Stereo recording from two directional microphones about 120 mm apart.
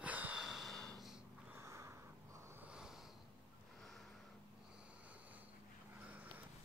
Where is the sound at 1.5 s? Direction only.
25° right (ahead or behind).